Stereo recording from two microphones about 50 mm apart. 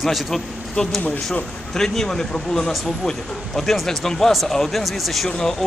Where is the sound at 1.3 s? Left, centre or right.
Centre.